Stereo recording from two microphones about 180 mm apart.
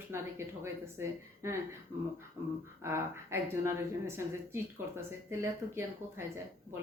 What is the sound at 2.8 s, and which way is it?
Speech, 15° right (ahead or behind).